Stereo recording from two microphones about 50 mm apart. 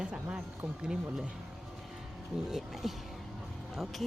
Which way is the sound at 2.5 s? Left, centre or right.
Centre.